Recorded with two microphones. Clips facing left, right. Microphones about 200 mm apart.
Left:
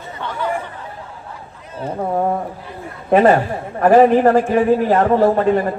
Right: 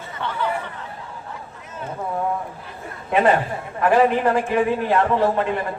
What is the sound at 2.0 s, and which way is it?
A man's voice, 45° left (ahead or behind).